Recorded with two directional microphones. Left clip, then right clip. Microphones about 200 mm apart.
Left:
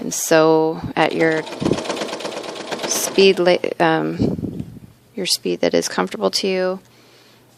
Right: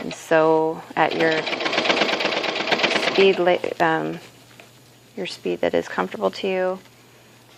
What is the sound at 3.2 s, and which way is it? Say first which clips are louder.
Speech: left 3 dB; 50° left (ahead or behind).